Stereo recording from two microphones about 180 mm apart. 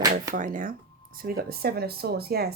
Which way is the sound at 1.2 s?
60° right (ahead or behind).